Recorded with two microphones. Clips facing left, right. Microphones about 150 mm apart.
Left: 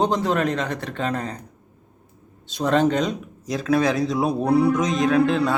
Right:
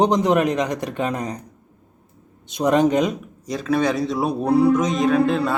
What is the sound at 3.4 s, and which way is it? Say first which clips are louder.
A man's voice: even; centre (ahead or behind).